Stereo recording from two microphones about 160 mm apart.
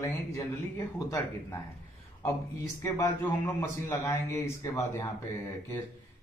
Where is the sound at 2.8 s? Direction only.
20° left (ahead or behind).